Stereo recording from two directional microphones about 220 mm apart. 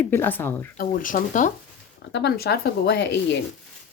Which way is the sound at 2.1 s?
50° left (ahead or behind).